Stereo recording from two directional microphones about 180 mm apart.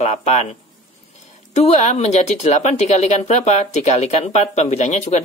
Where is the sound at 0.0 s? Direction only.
40° left (ahead or behind).